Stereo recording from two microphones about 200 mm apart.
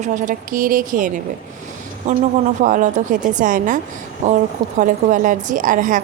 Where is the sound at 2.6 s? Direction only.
40° right (ahead or behind).